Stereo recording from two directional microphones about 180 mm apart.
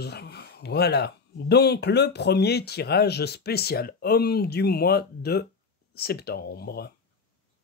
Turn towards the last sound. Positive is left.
turn(degrees=60)  # may be behind; listen again after turning